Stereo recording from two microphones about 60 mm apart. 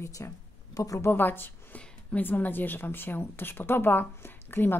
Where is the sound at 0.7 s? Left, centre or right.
Left.